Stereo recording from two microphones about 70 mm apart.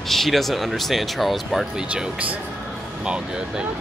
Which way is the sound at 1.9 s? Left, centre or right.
Centre.